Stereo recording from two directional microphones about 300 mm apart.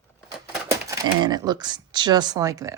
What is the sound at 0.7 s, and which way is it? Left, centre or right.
Speech, centre.